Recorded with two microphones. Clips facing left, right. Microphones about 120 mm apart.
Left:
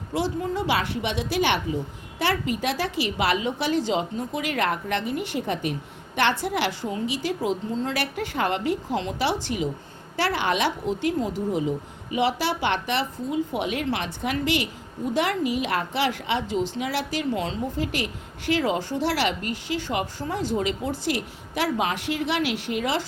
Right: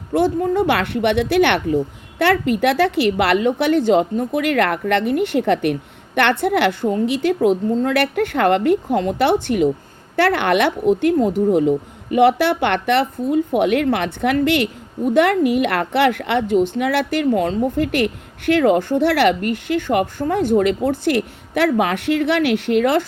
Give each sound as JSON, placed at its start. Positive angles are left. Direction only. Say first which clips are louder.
{"t": 0.1, "sound": "a woman's voice", "louder": "right 9 dB", "side_deg": -55}